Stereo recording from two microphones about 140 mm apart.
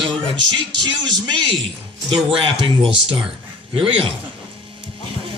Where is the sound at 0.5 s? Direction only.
35° right (ahead or behind).